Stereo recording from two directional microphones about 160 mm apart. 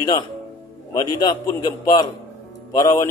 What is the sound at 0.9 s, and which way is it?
A man's voice, 25° left (ahead or behind).